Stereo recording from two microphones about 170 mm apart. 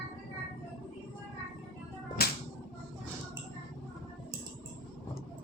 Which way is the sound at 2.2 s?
65° left (ahead or behind).